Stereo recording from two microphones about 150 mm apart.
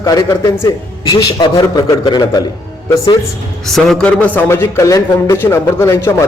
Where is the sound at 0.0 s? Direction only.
25° left (ahead or behind).